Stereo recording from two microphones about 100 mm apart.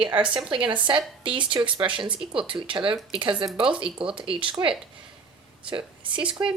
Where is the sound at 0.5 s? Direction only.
55° right (ahead or behind).